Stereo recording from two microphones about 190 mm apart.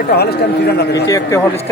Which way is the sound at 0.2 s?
55° left (ahead or behind).